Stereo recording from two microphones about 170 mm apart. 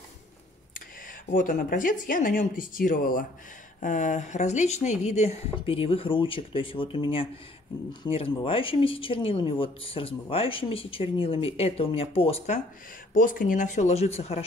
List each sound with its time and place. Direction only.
1.3 s speech: 50° left (ahead or behind); by 12.5 s 35° left (ahead or behind)
13.1 s speech: 55° left (ahead or behind); by 14.4 s 40° left (ahead or behind)